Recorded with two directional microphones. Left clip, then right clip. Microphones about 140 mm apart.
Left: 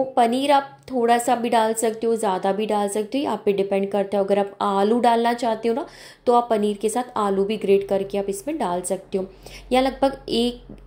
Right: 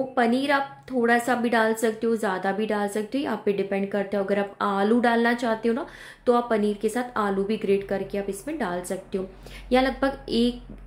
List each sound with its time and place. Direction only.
0.1 s a woman's voice: 20° left (ahead or behind)